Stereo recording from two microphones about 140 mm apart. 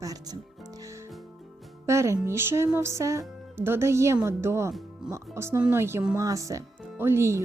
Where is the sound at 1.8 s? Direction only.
20° right (ahead or behind).